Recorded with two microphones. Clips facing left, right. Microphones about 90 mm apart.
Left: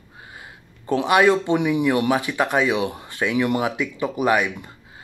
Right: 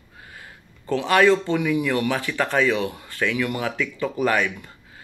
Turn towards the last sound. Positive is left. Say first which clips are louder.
# left 2 dB
turn(degrees=20)  # may be behind; listen again after turning